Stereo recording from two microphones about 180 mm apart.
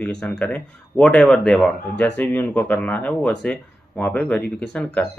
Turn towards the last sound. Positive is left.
turn(degrees=5)  # may be behind; listen again after turning